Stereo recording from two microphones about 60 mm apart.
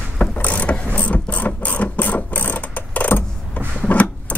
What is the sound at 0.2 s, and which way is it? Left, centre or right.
Ratchet, left.